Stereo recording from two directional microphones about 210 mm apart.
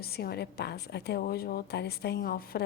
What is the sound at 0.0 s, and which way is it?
A woman's voice, 50° left (ahead or behind).